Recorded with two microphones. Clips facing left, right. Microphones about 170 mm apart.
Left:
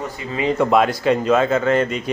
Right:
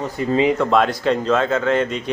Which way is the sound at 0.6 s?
5° left (ahead or behind).